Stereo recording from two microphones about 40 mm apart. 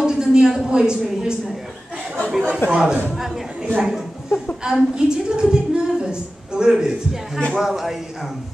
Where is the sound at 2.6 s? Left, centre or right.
Left.